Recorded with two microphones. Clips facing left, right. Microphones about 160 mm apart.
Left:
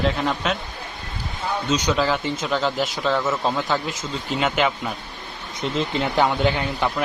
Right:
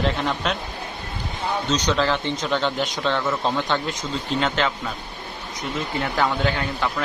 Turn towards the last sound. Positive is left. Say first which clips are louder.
# left 2 dB
turn(degrees=15)  # may be behind; listen again after turning